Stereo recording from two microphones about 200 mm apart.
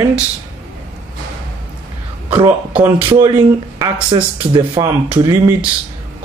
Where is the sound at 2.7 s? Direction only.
10° right (ahead or behind).